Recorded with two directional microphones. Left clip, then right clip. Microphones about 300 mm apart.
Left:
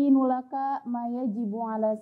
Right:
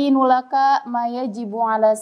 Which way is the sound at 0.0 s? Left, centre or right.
Centre.